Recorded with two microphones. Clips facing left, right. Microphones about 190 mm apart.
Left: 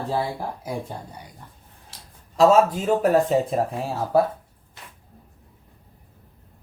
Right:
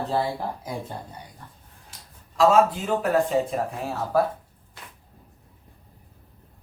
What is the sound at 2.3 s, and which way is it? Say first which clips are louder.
Speech: left 2 dB; 40° left (ahead or behind).